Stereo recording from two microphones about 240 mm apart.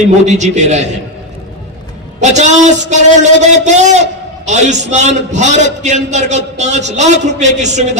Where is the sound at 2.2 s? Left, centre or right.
Right.